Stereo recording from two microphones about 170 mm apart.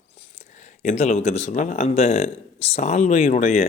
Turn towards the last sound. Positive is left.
turn(degrees=50)  # may be behind; listen again after turning